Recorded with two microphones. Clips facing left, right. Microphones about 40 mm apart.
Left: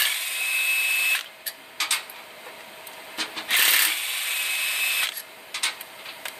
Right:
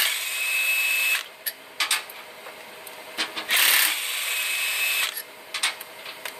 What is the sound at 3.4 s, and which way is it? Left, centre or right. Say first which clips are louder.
Rub: even; centre.